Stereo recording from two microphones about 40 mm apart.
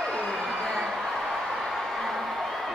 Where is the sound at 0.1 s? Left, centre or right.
Centre.